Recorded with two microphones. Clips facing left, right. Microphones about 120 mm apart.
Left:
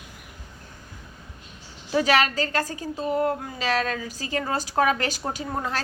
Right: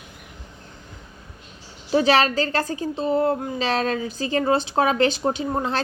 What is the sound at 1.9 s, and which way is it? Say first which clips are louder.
Speech: right 3 dB; 30° right (ahead or behind).